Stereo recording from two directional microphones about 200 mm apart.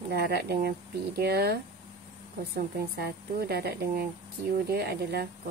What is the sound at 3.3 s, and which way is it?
A woman's voice, 50° right (ahead or behind).